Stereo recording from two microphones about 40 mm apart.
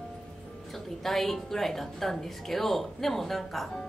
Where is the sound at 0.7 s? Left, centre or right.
Centre.